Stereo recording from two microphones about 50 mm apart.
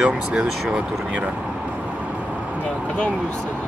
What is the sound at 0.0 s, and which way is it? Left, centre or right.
Speech, right.